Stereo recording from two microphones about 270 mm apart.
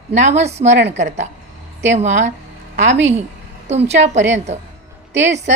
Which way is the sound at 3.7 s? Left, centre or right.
Right.